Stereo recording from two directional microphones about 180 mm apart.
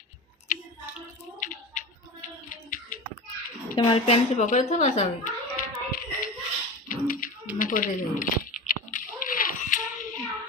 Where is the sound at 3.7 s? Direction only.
30° left (ahead or behind); by 6.3 s 50° left (ahead or behind).